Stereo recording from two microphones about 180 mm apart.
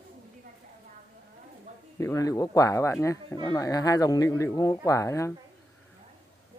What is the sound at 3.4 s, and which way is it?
Speech, 20° left (ahead or behind).